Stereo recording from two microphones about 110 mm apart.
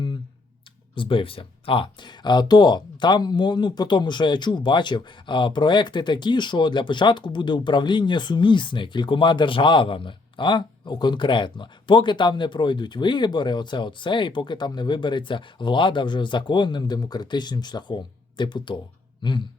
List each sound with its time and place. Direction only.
0.9 s speech: 50° left (ahead or behind)